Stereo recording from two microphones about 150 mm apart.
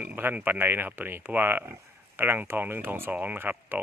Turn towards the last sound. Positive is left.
turn(degrees=-15)  # may be behind; listen again after turning